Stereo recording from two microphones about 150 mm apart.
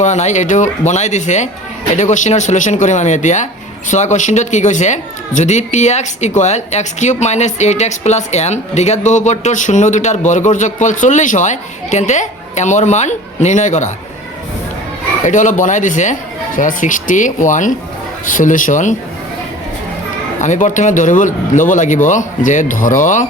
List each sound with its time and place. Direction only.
0.0 s speech: 50° left (ahead or behind)
15.2 s speech: 55° left (ahead or behind)
20.4 s speech: 55° left (ahead or behind)